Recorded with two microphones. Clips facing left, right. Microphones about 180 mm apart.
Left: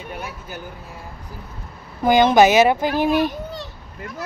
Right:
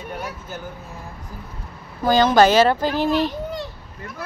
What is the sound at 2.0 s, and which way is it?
A child's voice, 15° left (ahead or behind).